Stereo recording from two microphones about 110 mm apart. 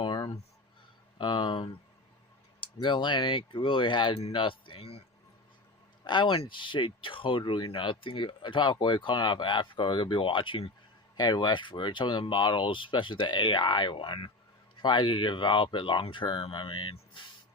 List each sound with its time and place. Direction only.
0.0 s a sound: 45° left (ahead or behind)
1.2 s speech: 45° left (ahead or behind)
2.8 s speech: 45° left (ahead or behind); by 5.0 s 65° left (ahead or behind)
6.1 s speech: 45° left (ahead or behind)